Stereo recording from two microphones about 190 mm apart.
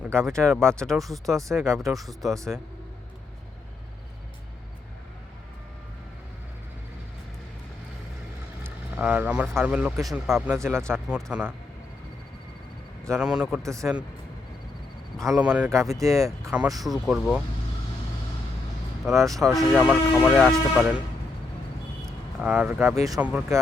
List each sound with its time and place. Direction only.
0.0 s speech: 5° left (ahead or behind)
1.6 s speech: 15° right (ahead or behind)
1.9 s speech: centre (ahead or behind)
8.6 s speech: 10° right (ahead or behind)
10.2 s speech: 15° right (ahead or behind)
13.1 s speech: 5° right (ahead or behind)
13.6 s speech: 15° right (ahead or behind)
15.4 s speech: 5° right (ahead or behind)
16.8 s speech: centre (ahead or behind)
19.1 s speech: 15° right (ahead or behind)
19.5 s speech: 5° right (ahead or behind)
22.4 s speech: 5° right (ahead or behind)